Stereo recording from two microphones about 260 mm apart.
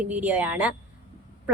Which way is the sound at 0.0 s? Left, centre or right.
Centre.